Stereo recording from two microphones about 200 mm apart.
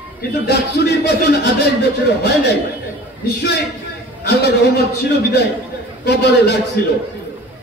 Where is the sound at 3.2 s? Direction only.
55° left (ahead or behind).